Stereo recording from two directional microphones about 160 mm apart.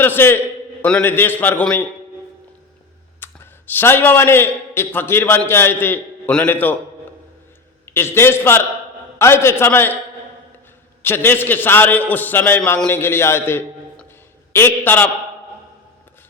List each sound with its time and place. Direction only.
0.0 s a man's voice: 15° left (ahead or behind)
3.2 s a man's voice: 15° left (ahead or behind)
7.9 s a man's voice: 15° left (ahead or behind)
11.0 s a man's voice: 15° left (ahead or behind)